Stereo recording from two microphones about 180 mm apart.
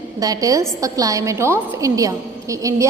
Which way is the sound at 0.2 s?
20° right (ahead or behind).